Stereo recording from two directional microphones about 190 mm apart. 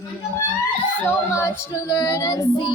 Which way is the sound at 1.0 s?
15° left (ahead or behind).